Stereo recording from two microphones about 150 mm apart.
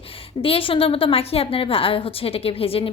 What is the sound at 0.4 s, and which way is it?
A woman's voice, 40° left (ahead or behind).